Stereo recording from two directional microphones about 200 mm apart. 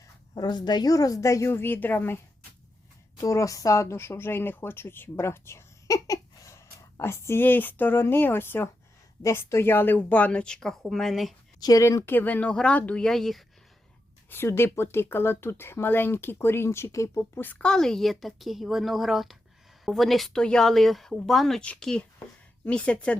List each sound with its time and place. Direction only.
0.0 s speech: 20° left (ahead or behind); by 11.3 s centre (ahead or behind)
11.6 s speech: 15° left (ahead or behind)